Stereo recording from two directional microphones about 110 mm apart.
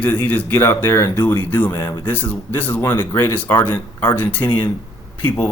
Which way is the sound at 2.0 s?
15° left (ahead or behind).